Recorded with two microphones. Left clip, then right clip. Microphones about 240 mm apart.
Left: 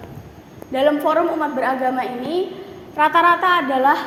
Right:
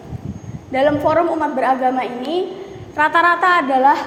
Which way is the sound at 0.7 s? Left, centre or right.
Centre.